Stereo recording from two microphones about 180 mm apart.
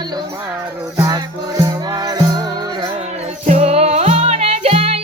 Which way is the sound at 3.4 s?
40° right (ahead or behind).